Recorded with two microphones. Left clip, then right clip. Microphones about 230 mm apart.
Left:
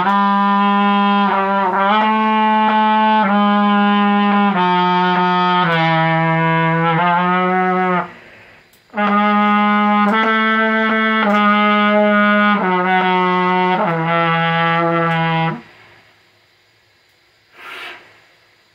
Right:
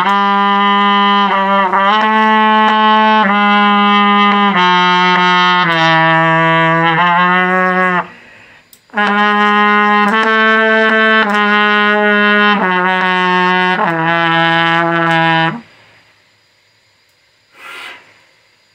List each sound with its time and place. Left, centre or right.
0.0 s music: right
8.9 s trumpet: right